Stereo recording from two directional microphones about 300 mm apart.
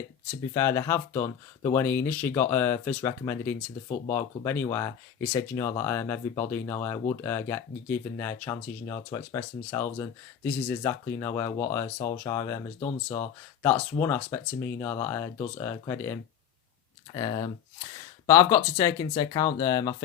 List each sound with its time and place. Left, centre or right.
0.5 s speech: centre